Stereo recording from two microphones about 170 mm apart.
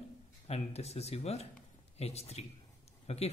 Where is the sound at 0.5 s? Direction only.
40° left (ahead or behind).